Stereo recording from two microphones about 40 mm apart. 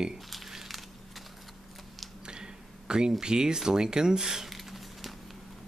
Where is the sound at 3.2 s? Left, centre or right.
Centre.